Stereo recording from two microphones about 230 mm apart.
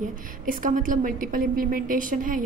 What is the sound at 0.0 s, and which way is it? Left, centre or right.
A woman's voice, right.